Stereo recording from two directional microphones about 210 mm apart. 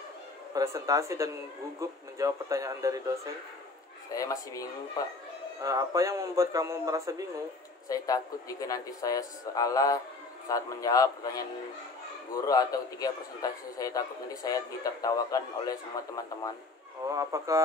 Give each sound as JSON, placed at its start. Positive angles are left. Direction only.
{"t": 0.6, "sound": "a man's voice", "side_deg": -15}
{"t": 4.1, "sound": "a man's voice", "side_deg": 15}
{"t": 5.6, "sound": "a man's voice", "side_deg": -15}
{"t": 7.9, "sound": "a man's voice", "side_deg": 15}
{"t": 17.1, "sound": "a man's voice", "side_deg": -15}